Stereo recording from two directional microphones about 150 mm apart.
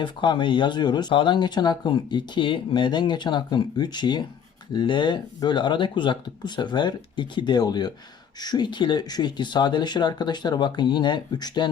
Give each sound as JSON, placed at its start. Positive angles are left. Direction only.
{"t": 0.0, "sound": "speech", "side_deg": 30}